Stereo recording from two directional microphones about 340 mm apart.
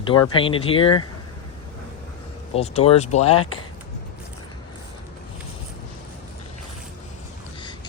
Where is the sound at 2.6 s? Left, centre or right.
Centre.